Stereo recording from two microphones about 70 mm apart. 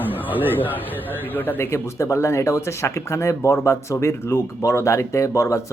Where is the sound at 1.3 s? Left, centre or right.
Left.